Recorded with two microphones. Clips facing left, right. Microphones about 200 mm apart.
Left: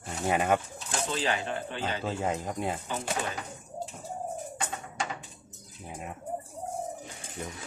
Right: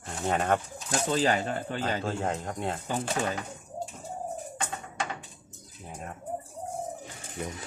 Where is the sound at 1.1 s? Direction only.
40° right (ahead or behind).